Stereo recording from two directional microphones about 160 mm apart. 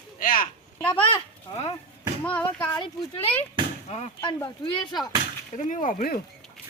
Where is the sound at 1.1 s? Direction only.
40° left (ahead or behind).